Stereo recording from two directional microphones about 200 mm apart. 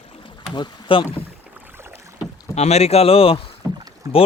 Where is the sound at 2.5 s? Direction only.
30° left (ahead or behind).